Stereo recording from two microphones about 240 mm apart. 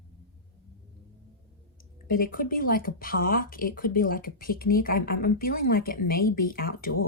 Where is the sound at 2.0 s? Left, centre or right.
Left.